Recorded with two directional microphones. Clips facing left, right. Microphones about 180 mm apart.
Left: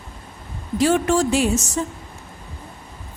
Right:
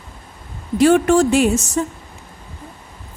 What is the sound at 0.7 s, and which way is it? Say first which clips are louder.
Speech: right 5 dB; 60° right (ahead or behind).